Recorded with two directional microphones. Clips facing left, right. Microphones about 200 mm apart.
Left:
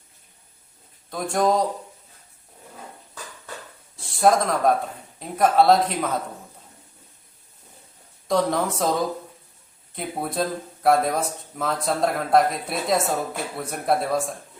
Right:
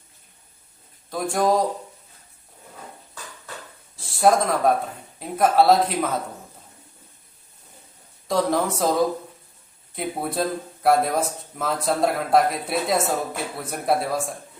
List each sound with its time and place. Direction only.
1.1 s speech: centre (ahead or behind)
3.9 s a sound: centre (ahead or behind)
5.2 s speech: centre (ahead or behind)
8.3 s speech: centre (ahead or behind)